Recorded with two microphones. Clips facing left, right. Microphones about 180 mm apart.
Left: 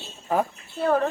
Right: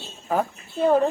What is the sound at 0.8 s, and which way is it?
Speech, 15° right (ahead or behind).